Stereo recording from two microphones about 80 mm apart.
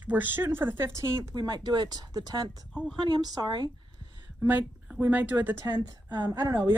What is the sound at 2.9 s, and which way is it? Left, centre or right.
Speech, right.